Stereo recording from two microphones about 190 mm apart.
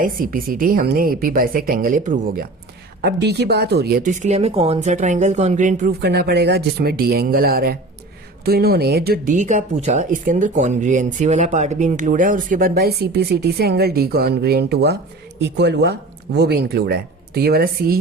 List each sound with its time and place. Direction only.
0.0 s speech: 50° right (ahead or behind)
3.0 s speech: 60° right (ahead or behind); by 5.9 s 45° right (ahead or behind)
6.0 s speech: 60° right (ahead or behind)